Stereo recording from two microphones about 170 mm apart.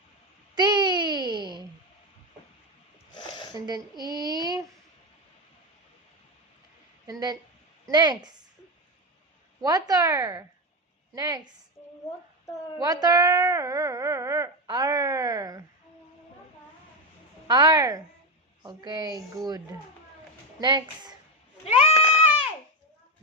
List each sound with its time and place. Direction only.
0.5 s a sound: 25° right (ahead or behind)
3.2 s a sound: 25° left (ahead or behind)
3.5 s speech: 25° right (ahead or behind)
4.1 s child singing: 25° right (ahead or behind)
7.1 s speech: 25° right (ahead or behind)
9.6 s speech: 20° right (ahead or behind)
12.8 s speech: 20° right (ahead or behind)
17.5 s speech: 25° right (ahead or behind)
21.6 s goat: 35° left (ahead or behind)